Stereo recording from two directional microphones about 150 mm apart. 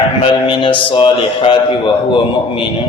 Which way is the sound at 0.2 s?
35° left (ahead or behind).